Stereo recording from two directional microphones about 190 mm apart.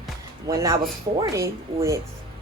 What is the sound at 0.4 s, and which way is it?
Speech, 15° right (ahead or behind).